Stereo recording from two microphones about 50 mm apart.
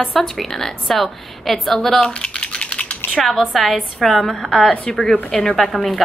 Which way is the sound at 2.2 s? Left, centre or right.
Left.